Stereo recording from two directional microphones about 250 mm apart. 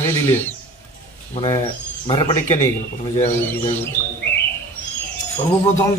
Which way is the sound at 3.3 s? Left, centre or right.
Centre.